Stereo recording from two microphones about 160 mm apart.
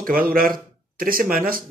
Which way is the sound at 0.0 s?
60° right (ahead or behind).